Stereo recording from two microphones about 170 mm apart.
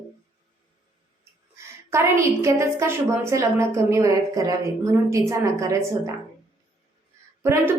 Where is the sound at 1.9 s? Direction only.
15° right (ahead or behind).